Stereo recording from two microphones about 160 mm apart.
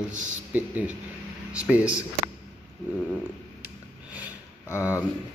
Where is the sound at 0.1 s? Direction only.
50° right (ahead or behind).